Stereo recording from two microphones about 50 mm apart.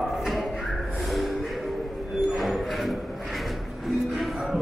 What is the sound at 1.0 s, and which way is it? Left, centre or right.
Music, centre.